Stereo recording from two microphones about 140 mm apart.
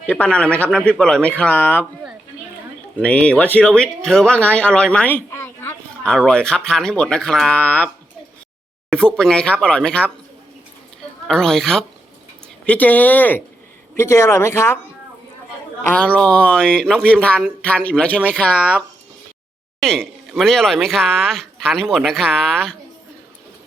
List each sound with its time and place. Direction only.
0.0 s speech: 10° left (ahead or behind)
3.0 s speech: 10° left (ahead or behind)
6.0 s speech: 5° left (ahead or behind)
8.9 s speech: 5° left (ahead or behind)
11.3 s speech: 5° left (ahead or behind)
15.8 s speech: 10° left (ahead or behind)
19.8 s speech: 5° left (ahead or behind)